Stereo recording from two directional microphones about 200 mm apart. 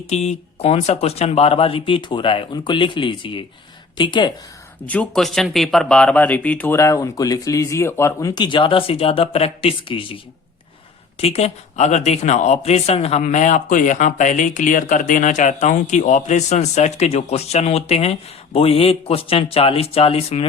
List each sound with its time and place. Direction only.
0.1 s speech: 35° left (ahead or behind)
4.9 s speech: 5° left (ahead or behind); by 10.2 s 30° left (ahead or behind)
11.2 s speech: 30° left (ahead or behind)